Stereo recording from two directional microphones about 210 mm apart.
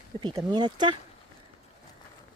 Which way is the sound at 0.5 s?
20° right (ahead or behind).